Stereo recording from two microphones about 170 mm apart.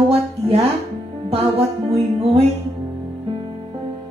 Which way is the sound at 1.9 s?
35° right (ahead or behind).